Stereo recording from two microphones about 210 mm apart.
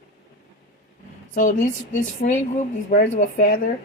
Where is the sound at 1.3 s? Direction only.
35° left (ahead or behind).